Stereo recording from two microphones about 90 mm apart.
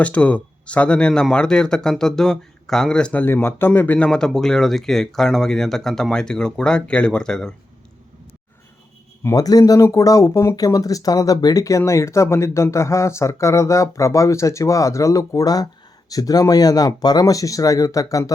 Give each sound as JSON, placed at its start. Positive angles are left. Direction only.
{"t": 0.0, "sound": "speech", "side_deg": 15}
{"t": 9.3, "sound": "speech", "side_deg": 45}